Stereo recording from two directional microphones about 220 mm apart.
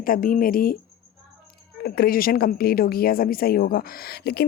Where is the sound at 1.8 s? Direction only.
45° left (ahead or behind).